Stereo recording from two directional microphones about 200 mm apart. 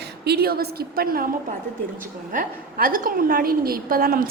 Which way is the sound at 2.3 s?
45° right (ahead or behind).